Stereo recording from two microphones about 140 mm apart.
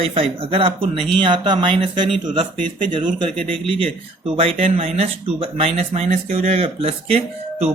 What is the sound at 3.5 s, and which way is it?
Speech, 40° right (ahead or behind).